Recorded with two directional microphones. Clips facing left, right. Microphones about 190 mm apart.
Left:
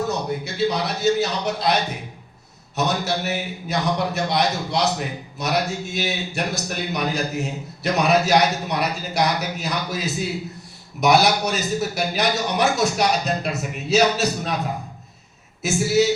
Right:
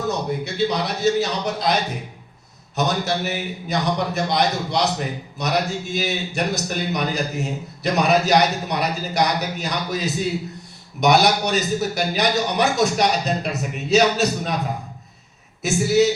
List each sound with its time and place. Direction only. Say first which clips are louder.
0.1 s a man's voice: right 1 dB; centre (ahead or behind)
2.7 s a man's voice: right 1 dB; centre (ahead or behind)
15.6 s a man's voice: right 1 dB; centre (ahead or behind)